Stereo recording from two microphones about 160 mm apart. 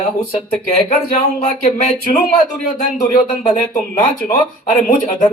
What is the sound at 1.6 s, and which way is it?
Speech, 30° left (ahead or behind).